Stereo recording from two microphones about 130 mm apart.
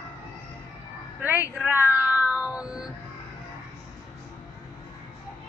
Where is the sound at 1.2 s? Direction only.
15° right (ahead or behind).